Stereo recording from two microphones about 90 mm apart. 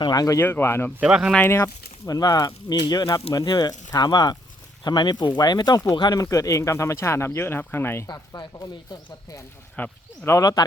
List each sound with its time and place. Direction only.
0.0 s speech: 45° left (ahead or behind)
0.3 s speech: 25° left (ahead or behind)
1.0 s speech: 10° right (ahead or behind)
1.5 s speech: 30° left (ahead or behind)
2.0 s speech: 45° left (ahead or behind)
6.3 s speech: 35° left (ahead or behind)
8.0 s speech: 50° left (ahead or behind)
9.8 s speech: 20° left (ahead or behind)
10.2 s speech: 40° left (ahead or behind)